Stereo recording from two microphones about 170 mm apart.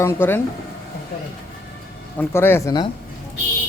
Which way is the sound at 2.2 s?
15° left (ahead or behind).